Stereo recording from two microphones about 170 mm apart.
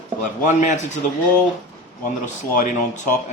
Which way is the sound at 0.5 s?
45° left (ahead or behind).